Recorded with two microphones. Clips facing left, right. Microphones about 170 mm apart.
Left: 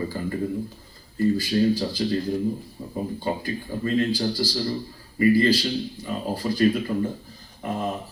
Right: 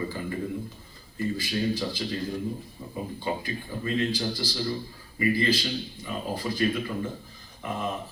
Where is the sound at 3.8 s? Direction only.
45° left (ahead or behind).